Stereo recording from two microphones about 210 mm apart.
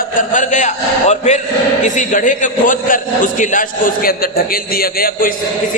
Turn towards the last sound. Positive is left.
turn(degrees=45)  # may be behind; listen again after turning